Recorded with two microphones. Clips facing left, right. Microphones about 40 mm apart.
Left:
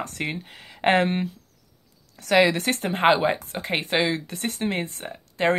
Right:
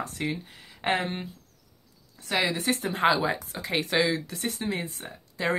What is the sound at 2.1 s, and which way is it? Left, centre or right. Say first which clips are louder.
Speech: left 8 dB; left.